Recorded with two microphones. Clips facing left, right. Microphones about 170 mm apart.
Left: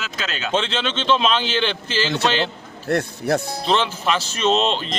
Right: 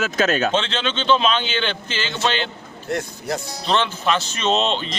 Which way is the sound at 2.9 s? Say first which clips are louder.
Left 5 dB; 65° left (ahead or behind).